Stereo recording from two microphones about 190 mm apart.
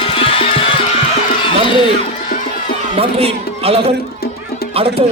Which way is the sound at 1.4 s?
25° left (ahead or behind).